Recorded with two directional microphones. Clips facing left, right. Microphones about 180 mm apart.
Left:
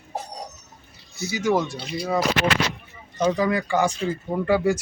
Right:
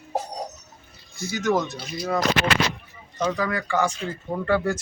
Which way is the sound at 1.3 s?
10° left (ahead or behind).